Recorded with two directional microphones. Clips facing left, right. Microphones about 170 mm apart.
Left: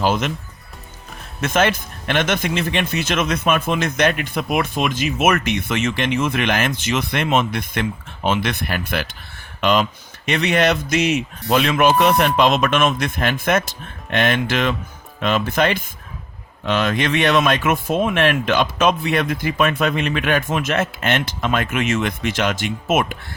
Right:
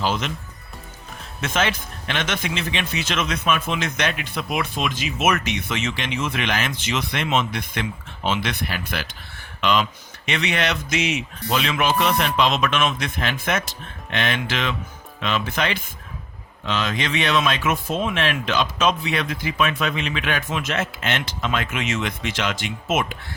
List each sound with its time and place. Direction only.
0.0 s speech: 50° left (ahead or behind)
1.4 s speech: 50° left (ahead or behind)